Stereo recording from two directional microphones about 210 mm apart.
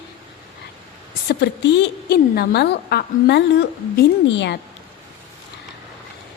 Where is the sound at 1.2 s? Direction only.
55° left (ahead or behind).